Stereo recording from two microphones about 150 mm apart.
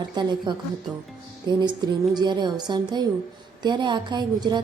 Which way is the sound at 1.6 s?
30° right (ahead or behind).